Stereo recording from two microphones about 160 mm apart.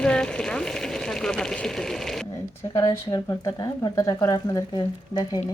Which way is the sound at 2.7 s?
20° left (ahead or behind).